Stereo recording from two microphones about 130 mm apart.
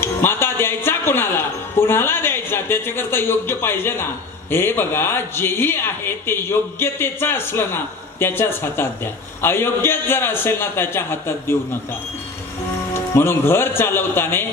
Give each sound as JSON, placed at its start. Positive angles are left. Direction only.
{"t": 0.0, "sound": "speech", "side_deg": 15}
{"t": 12.9, "sound": "speech", "side_deg": 20}